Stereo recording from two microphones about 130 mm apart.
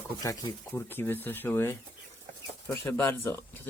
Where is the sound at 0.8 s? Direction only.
15° left (ahead or behind).